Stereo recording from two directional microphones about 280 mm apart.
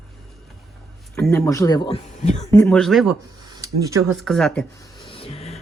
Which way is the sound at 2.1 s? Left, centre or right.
Left.